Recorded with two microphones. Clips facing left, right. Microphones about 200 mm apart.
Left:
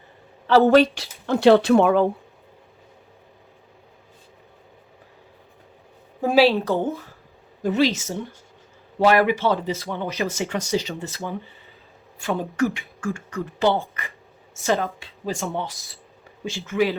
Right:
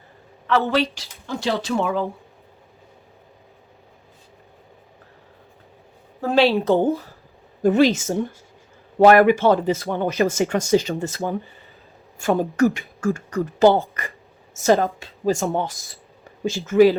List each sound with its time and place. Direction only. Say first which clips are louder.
0.6 s speech: left 7 dB; 50° left (ahead or behind)
1.3 s speech: left 9 dB; 60° left (ahead or behind)
6.2 s a woman's voice: left 1 dB; 5° left (ahead or behind)
6.7 s speech: right 5 dB; 30° right (ahead or behind)
7.6 s speech: right 5 dB; 50° right (ahead or behind)